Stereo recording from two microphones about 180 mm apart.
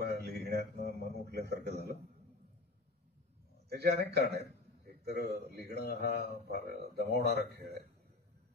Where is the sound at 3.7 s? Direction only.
65° right (ahead or behind).